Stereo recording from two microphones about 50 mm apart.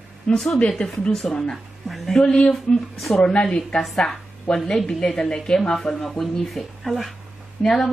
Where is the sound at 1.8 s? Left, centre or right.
Centre.